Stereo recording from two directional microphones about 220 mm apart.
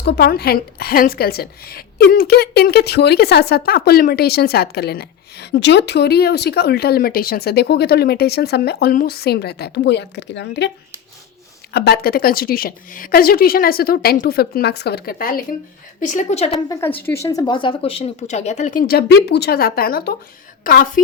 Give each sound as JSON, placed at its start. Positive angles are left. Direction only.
{"t": 0.0, "sound": "a woman's voice", "side_deg": 45}
{"t": 11.7, "sound": "a woman's voice", "side_deg": 45}
{"t": 16.6, "sound": "a woman's voice", "side_deg": 15}